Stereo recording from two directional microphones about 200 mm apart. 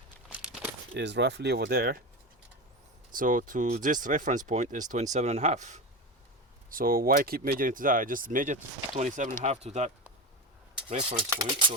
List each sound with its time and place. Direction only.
0.3 s crumpling: 5° right (ahead or behind)
0.9 s speech: 60° right (ahead or behind)
3.1 s speech: 40° right (ahead or behind)
11.3 s speech: 20° right (ahead or behind)